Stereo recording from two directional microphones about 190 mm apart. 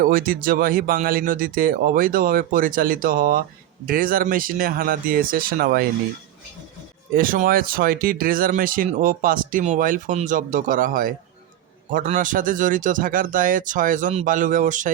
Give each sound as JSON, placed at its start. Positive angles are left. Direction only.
{"t": 0.0, "sound": "speech", "side_deg": -50}
{"t": 7.1, "sound": "speech", "side_deg": -45}